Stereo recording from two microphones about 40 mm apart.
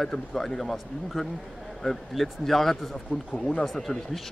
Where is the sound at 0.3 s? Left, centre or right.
Centre.